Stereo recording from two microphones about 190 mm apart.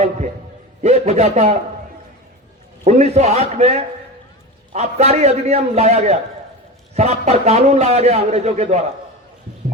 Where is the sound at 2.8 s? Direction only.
35° right (ahead or behind).